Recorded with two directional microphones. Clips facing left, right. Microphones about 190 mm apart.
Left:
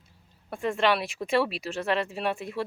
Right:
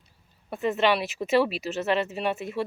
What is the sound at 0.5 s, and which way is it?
Speech, 5° right (ahead or behind).